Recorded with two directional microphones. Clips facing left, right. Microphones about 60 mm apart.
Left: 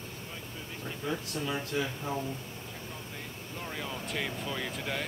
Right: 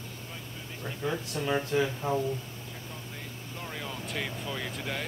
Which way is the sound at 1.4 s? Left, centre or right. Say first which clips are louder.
Right 8 dB; right.